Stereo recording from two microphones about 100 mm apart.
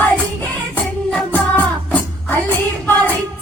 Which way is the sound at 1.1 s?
10° left (ahead or behind).